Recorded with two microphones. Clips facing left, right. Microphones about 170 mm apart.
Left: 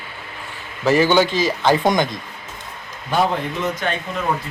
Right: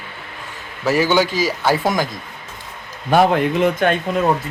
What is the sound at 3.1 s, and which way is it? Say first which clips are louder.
Speech: right 6 dB; 60° right (ahead or behind).